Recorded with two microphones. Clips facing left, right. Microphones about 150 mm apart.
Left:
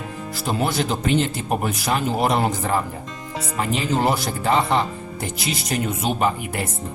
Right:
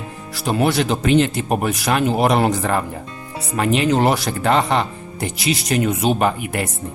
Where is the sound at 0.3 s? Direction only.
70° right (ahead or behind).